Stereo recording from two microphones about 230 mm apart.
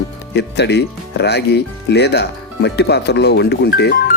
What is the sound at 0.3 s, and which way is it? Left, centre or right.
Speech, left.